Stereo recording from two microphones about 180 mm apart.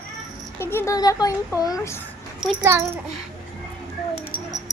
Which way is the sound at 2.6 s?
15° right (ahead or behind).